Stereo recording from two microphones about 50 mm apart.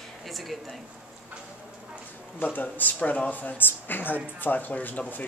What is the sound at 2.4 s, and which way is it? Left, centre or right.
Speech, left.